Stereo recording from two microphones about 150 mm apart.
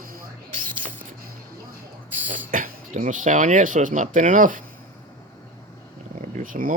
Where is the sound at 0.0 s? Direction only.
70° right (ahead or behind).